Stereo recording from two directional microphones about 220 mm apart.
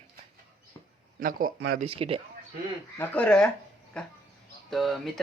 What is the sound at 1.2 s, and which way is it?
Speech, 40° right (ahead or behind).